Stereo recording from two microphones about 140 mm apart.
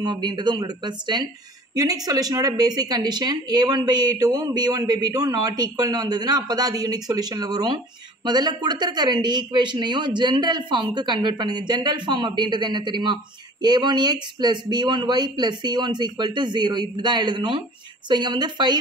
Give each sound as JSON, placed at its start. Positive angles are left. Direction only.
{"t": 0.0, "sound": "a woman's voice", "side_deg": -30}